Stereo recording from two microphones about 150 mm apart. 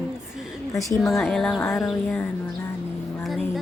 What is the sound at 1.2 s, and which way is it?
Speech, centre (ahead or behind).